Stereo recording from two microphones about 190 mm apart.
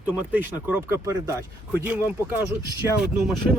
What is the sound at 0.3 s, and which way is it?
Speech, 10° right (ahead or behind).